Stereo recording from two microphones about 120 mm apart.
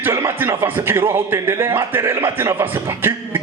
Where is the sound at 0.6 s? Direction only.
20° right (ahead or behind).